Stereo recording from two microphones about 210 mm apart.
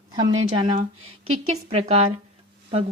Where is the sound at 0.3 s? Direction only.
25° right (ahead or behind).